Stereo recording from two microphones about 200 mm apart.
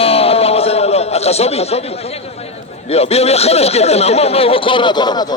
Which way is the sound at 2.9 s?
30° left (ahead or behind).